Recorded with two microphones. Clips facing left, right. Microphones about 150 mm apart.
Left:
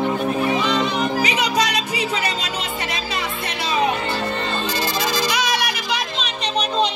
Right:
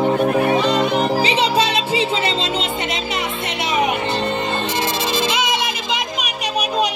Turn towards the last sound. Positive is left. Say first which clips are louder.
# right 1 dB
turn(degrees=-10)  # may be behind; listen again after turning